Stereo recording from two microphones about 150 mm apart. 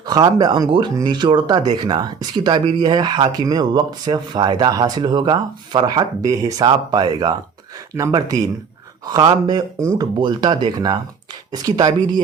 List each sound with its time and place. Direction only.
0.0 s speech: 25° right (ahead or behind)
10.2 s speech: 30° right (ahead or behind)